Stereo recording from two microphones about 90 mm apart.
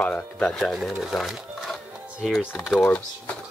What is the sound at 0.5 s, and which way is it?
Speech, centre (ahead or behind).